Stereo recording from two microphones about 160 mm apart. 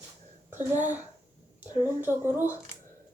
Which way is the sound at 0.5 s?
50° right (ahead or behind).